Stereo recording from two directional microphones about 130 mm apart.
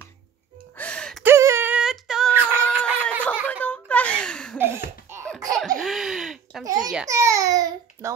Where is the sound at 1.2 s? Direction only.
20° right (ahead or behind).